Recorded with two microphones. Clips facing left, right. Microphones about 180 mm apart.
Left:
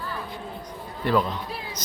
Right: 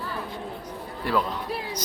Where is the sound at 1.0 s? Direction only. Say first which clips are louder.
Left 3 dB; 5° right (ahead or behind).